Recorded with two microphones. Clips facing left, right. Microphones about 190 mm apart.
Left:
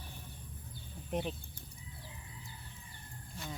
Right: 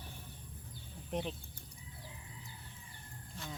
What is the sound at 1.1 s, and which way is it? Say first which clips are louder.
Speech: left 2 dB; 5° left (ahead or behind).